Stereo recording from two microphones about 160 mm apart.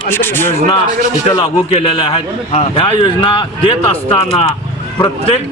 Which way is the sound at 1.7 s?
35° left (ahead or behind).